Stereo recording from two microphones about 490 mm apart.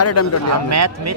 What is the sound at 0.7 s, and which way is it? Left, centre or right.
Speech, right.